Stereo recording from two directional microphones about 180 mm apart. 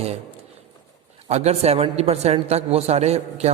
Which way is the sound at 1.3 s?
35° right (ahead or behind).